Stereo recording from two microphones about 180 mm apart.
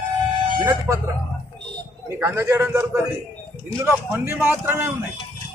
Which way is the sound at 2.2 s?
15° right (ahead or behind).